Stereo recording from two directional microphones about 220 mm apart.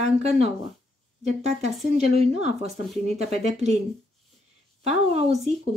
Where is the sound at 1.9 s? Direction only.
30° right (ahead or behind).